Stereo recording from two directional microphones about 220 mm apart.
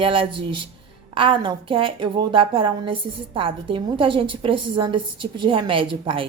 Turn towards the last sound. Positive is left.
turn(degrees=-25)  # may be behind; listen again after turning